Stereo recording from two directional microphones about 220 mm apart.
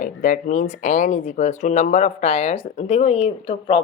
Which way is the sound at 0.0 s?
40° left (ahead or behind).